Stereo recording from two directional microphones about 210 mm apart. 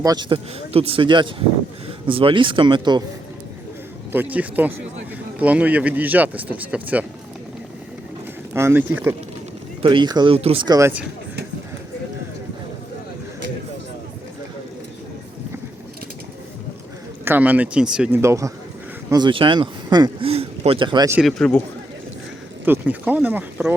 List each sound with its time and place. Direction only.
0.0 s speech: 20° right (ahead or behind)
4.1 s speech: 10° right (ahead or behind)
8.5 s speech: 10° right (ahead or behind)
9.8 s speech: 20° right (ahead or behind)
17.2 s speech: 10° right (ahead or behind)
21.2 s speech: centre (ahead or behind)
22.6 s speech: 10° right (ahead or behind)